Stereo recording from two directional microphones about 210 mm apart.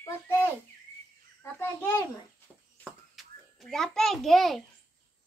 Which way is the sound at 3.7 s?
Centre (ahead or behind).